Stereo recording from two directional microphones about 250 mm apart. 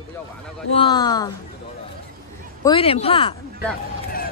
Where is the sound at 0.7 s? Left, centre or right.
Centre.